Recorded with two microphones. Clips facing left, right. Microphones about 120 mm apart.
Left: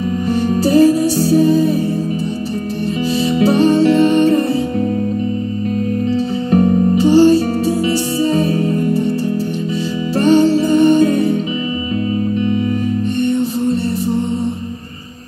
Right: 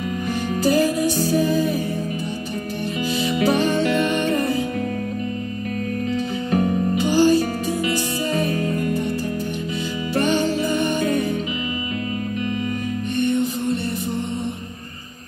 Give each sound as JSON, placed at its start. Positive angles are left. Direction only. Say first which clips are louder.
{"t": 0.3, "sound": "music", "louder": "left 6 dB", "side_deg": 30}
{"t": 3.2, "sound": "music", "louder": "left 6 dB", "side_deg": 30}
{"t": 6.0, "sound": "music", "louder": "left 7 dB", "side_deg": 35}
{"t": 10.1, "sound": "music", "louder": "left 9 dB", "side_deg": 35}
{"t": 13.2, "sound": "music", "louder": "left 3 dB", "side_deg": 30}